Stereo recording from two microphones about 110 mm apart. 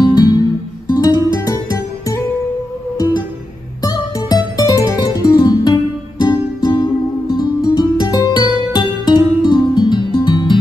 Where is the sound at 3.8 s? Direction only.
35° left (ahead or behind).